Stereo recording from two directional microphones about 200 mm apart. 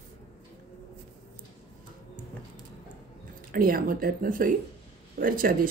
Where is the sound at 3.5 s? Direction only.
45° right (ahead or behind).